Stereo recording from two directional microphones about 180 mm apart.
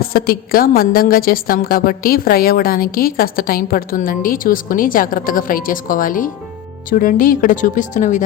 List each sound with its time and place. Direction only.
0.1 s a woman's voice: 55° left (ahead or behind)